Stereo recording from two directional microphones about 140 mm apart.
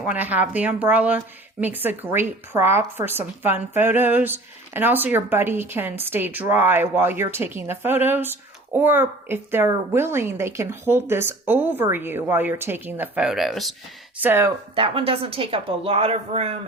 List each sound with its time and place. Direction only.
0.1 s speech: 10° right (ahead or behind)
14.2 s speech: 15° right (ahead or behind)
14.8 s speech: 40° right (ahead or behind)